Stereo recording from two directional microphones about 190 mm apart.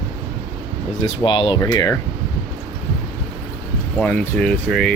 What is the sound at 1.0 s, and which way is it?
Speech, 25° left (ahead or behind).